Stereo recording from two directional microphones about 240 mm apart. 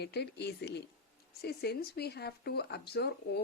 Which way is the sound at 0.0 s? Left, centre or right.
Left.